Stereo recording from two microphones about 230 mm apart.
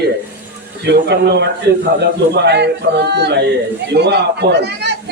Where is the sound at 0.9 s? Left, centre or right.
Right.